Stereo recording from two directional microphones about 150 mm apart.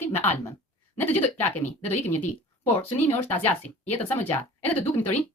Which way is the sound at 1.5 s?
10° left (ahead or behind).